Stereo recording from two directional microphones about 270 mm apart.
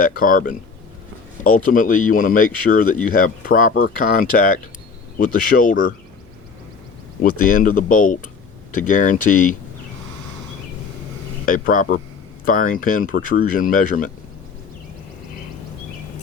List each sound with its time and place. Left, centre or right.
0.0 s speech: left
7.2 s speech: left
11.4 s speech: left